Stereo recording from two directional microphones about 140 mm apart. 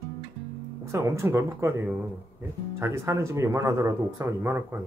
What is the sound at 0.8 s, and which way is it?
Speech, 20° right (ahead or behind).